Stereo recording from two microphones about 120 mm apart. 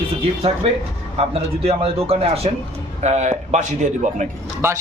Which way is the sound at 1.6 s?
55° right (ahead or behind).